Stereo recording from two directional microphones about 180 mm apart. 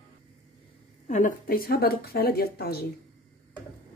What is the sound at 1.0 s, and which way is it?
A woman's voice, 45° left (ahead or behind).